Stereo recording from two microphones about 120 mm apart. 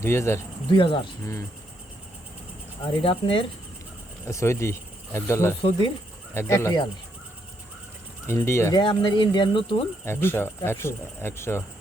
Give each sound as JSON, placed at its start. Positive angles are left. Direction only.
{"t": 0.0, "sound": "speech", "side_deg": 20}
{"t": 0.7, "sound": "speech", "side_deg": 45}
{"t": 2.8, "sound": "speech", "side_deg": 45}
{"t": 4.3, "sound": "speech", "side_deg": 25}
{"t": 8.3, "sound": "speech", "side_deg": 20}
{"t": 8.7, "sound": "speech", "side_deg": 40}
{"t": 10.1, "sound": "speech", "side_deg": 20}